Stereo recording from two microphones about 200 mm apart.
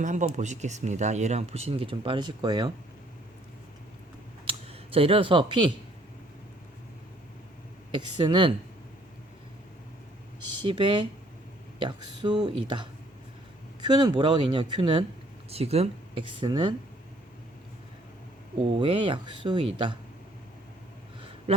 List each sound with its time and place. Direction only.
0.0 s speech: 40° right (ahead or behind); by 2.7 s 20° right (ahead or behind)
4.4 s speech: 30° right (ahead or behind)
7.9 s speech: 25° right (ahead or behind)
10.6 s speech: 25° right (ahead or behind)
18.8 s speech: 25° right (ahead or behind)